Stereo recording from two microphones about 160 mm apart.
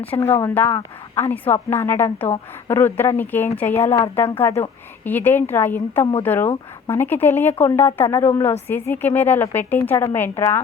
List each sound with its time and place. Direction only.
0.2 s a woman's voice: 15° left (ahead or behind)